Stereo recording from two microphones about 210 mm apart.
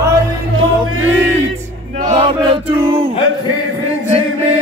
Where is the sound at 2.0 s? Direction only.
30° right (ahead or behind).